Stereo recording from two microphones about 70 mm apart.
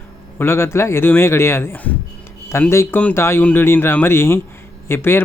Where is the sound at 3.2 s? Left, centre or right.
Left.